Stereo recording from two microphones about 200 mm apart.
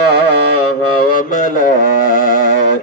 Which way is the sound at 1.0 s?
40° left (ahead or behind).